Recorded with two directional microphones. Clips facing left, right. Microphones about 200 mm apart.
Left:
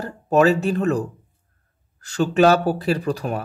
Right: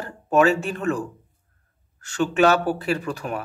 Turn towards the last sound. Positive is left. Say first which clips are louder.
# left 3 dB
turn(degrees=35)  # may be behind; listen again after turning